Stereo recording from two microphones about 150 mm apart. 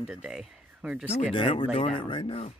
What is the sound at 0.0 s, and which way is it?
Speech, 5° right (ahead or behind).